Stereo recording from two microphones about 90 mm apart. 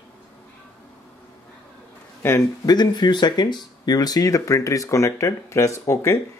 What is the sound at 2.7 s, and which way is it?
Speech, 55° left (ahead or behind).